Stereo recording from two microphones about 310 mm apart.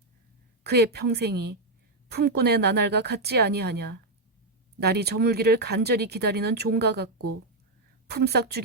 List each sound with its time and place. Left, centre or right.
0.6 s speech: right
8.1 s speech: right